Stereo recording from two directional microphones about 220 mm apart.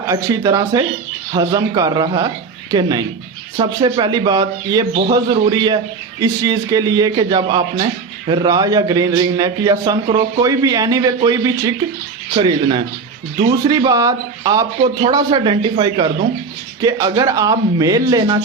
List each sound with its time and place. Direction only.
0.1 s a man's voice: 15° right (ahead or behind)
3.6 s a man's voice: 25° right (ahead or behind)